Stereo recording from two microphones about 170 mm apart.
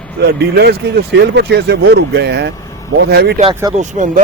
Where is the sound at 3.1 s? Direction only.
70° right (ahead or behind).